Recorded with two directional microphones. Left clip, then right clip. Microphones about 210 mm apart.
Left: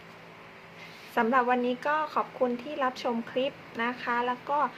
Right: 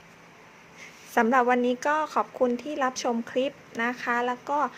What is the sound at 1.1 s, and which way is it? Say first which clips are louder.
Speech: right 3 dB; 35° right (ahead or behind).